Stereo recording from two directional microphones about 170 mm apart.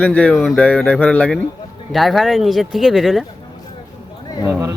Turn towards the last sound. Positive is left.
turn(degrees=-15)  # may be behind; listen again after turning